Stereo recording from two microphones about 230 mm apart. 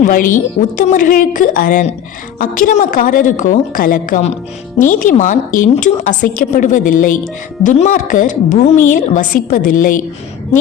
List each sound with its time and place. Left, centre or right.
0.0 s a woman's voice: left